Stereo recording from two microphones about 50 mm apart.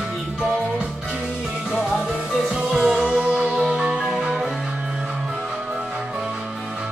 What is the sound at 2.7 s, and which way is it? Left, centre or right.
Music, centre.